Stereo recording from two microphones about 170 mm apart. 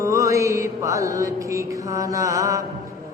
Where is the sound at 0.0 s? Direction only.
20° right (ahead or behind).